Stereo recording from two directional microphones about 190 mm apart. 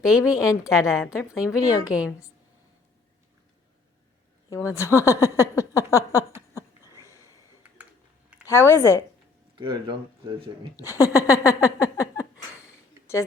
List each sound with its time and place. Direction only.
0.0 s a woman's voice: 5° right (ahead or behind)
4.4 s speech: 15° left (ahead or behind)
6.9 s snort: 15° left (ahead or behind)
8.4 s speech: 15° left (ahead or behind)
9.6 s speech: 25° right (ahead or behind)
10.8 s speech: 15° left (ahead or behind)
12.6 s a sound: 15° left (ahead or behind)